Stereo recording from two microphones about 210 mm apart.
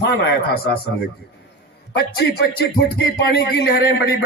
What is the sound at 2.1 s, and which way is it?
Speech, 45° left (ahead or behind).